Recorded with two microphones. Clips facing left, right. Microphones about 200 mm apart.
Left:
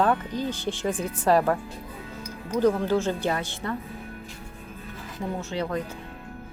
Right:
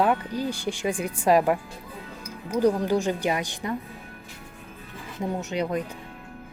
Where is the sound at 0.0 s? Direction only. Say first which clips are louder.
Even; 10° right (ahead or behind).